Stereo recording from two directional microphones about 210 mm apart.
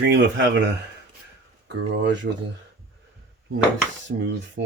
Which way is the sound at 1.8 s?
55° right (ahead or behind).